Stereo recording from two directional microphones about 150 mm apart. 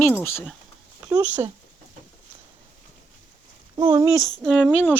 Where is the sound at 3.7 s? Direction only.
25° right (ahead or behind).